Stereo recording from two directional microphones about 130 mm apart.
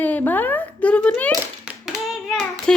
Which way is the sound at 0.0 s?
15° left (ahead or behind).